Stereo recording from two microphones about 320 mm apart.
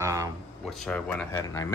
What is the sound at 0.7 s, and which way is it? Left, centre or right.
Speech, centre.